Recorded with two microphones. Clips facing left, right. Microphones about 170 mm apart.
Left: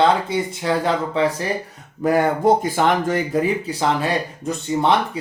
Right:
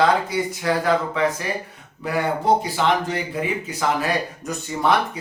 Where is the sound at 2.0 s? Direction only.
45° left (ahead or behind).